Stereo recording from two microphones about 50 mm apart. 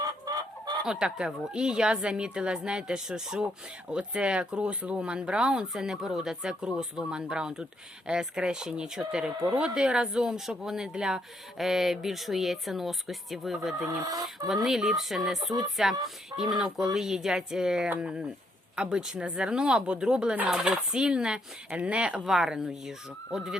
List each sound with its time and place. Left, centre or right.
0.9 s speech: centre
20.5 s speech: centre
20.9 s speech: centre
22.3 s speech: centre